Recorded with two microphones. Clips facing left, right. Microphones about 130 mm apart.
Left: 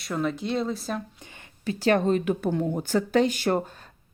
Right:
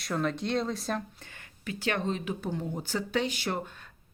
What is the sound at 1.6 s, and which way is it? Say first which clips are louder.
Speech: left 9 dB; 35° left (ahead or behind).